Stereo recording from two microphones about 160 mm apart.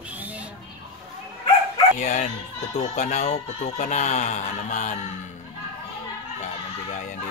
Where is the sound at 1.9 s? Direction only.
45° left (ahead or behind).